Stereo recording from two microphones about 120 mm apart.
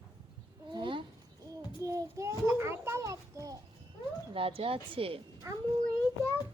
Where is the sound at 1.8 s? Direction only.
25° right (ahead or behind).